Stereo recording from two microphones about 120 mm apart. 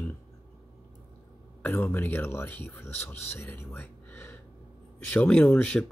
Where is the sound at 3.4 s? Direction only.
20° left (ahead or behind).